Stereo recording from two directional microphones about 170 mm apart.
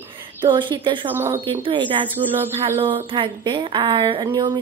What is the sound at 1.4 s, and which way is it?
Speech, 30° right (ahead or behind).